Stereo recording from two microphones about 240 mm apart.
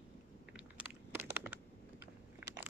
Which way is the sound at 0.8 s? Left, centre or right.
Centre.